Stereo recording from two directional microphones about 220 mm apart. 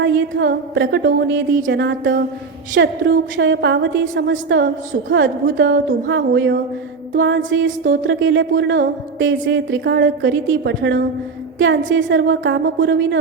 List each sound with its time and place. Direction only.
0.0 s a woman's voice: 55° right (ahead or behind)